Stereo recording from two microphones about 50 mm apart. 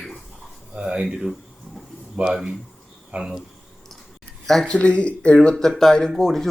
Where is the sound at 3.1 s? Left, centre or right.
Right.